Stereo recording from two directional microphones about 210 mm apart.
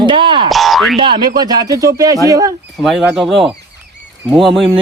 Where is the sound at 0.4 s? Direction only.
Centre (ahead or behind).